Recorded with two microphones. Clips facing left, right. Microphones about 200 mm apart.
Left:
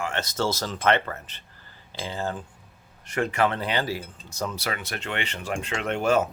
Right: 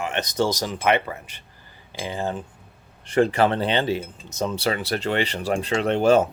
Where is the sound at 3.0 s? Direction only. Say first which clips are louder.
Right 5 dB; 30° right (ahead or behind).